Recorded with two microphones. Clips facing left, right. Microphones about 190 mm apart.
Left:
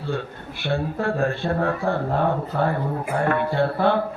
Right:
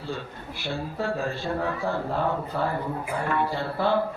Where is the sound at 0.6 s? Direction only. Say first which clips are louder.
Left 6 dB; 60° left (ahead or behind).